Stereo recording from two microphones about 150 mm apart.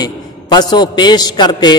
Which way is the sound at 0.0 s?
25° left (ahead or behind).